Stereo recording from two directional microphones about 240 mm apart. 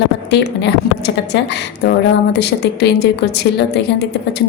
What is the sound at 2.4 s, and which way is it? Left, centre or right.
A woman's voice, left.